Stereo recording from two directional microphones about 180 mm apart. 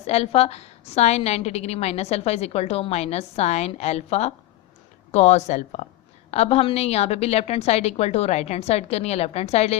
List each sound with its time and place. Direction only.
0.1 s a woman's voice: 35° left (ahead or behind)